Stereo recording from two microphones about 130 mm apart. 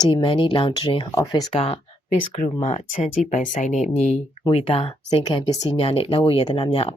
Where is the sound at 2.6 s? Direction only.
65° left (ahead or behind).